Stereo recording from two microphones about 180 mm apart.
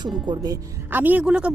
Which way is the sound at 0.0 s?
25° right (ahead or behind).